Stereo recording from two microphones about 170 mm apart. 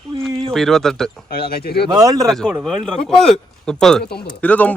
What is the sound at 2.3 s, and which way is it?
A man's voice, 5° left (ahead or behind).